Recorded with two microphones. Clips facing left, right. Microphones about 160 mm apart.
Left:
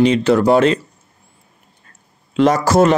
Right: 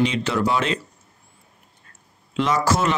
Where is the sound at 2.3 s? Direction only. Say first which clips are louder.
Left 8 dB; 45° left (ahead or behind).